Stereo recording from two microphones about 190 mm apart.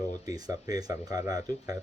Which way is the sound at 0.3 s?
20° right (ahead or behind).